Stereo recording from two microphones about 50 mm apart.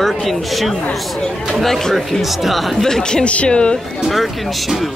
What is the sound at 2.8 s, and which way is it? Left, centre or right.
Speech, centre.